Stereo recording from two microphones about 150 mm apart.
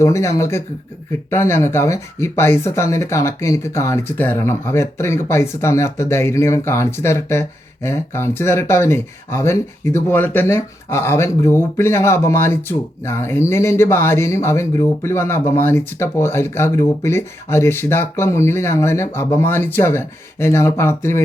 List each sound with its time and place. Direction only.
0.0 s speech: 20° left (ahead or behind)